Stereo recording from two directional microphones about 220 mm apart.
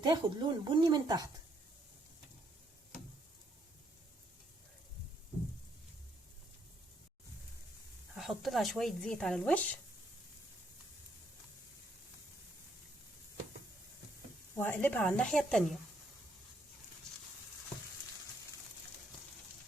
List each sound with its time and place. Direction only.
0.0 s speech: 20° right (ahead or behind)
8.1 s speech: centre (ahead or behind)
14.5 s speech: 10° left (ahead or behind)